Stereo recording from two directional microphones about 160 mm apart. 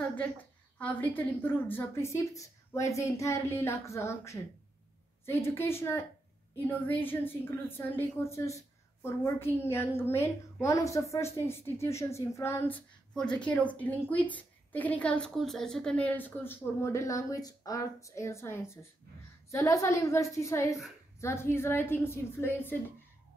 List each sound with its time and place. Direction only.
0.7 s a woman's voice: 10° left (ahead or behind)